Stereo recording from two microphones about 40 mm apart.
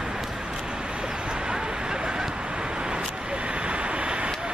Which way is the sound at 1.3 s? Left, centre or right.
Centre.